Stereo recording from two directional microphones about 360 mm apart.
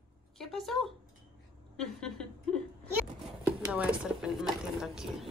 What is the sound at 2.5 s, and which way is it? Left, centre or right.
Whimper, centre.